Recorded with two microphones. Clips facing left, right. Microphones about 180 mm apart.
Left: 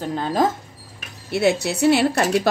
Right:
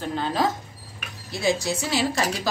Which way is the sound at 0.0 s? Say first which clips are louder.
Left 4 dB; 45° left (ahead or behind).